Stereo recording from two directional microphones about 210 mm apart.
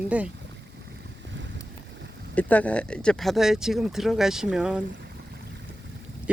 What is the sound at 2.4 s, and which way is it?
Speech, 5° left (ahead or behind).